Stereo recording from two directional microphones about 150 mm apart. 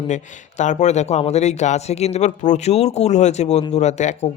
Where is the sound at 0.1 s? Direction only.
55° left (ahead or behind).